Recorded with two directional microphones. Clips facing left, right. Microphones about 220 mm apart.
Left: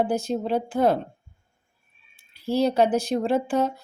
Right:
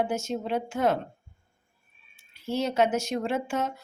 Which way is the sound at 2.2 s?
35° left (ahead or behind).